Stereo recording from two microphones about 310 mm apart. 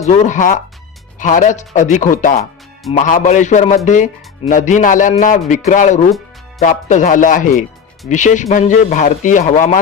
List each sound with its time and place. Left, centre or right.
0.0 s speech: left